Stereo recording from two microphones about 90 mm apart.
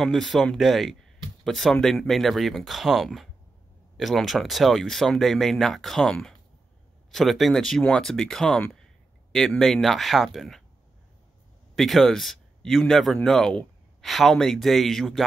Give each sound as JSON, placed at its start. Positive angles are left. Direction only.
{"t": 0.0, "sound": "speech", "side_deg": 5}
{"t": 11.7, "sound": "speech", "side_deg": 0}